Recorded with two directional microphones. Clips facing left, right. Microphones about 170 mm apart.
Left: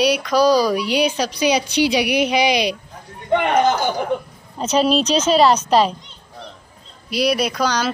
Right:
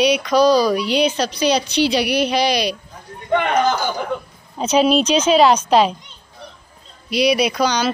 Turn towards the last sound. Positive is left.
turn(degrees=0)  # may be behind; listen again after turning